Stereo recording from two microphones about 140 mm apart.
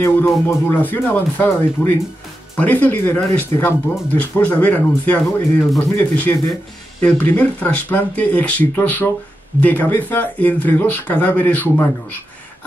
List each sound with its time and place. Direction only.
0.0 s speech: 15° left (ahead or behind)